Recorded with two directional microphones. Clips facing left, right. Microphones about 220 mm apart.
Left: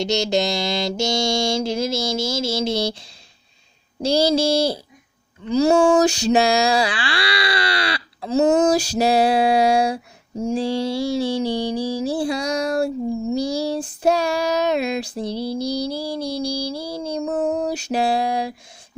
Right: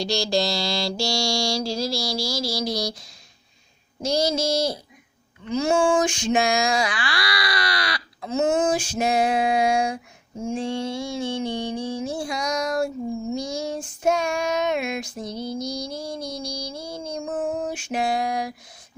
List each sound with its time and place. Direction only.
0.0 s mantra: 20° left (ahead or behind)
13.3 s child singing: 35° left (ahead or behind)